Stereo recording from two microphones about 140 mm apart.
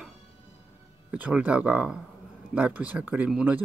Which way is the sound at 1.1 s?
10° right (ahead or behind).